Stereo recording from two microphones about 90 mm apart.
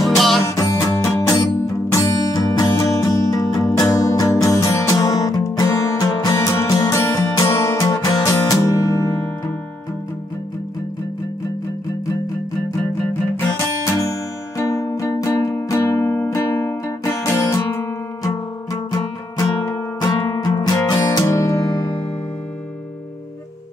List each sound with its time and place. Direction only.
0.4 s music: 35° left (ahead or behind)
14.6 s music: 40° left (ahead or behind)